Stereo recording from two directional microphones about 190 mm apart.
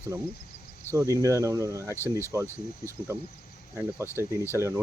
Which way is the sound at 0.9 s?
15° right (ahead or behind).